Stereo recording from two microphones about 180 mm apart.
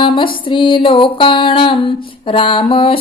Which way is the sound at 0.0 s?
25° left (ahead or behind).